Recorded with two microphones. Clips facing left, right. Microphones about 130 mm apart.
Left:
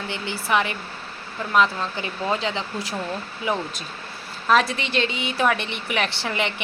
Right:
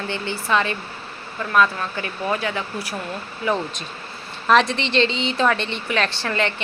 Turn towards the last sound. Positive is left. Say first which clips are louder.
# right 2 dB
turn(degrees=15)  # may be behind; listen again after turning